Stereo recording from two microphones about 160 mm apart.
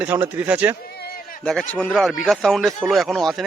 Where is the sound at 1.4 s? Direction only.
5° left (ahead or behind).